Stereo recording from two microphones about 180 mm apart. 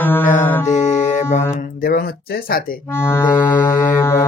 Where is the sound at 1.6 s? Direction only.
55° left (ahead or behind).